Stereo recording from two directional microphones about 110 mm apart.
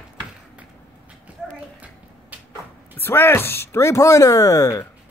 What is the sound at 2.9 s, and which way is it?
Speech, 20° left (ahead or behind).